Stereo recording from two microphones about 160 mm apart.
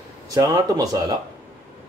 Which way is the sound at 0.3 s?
25° right (ahead or behind).